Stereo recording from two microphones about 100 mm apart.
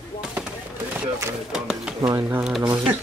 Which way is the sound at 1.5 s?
5° right (ahead or behind).